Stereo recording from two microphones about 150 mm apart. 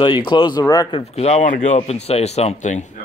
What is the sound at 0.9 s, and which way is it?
Speech, 45° left (ahead or behind).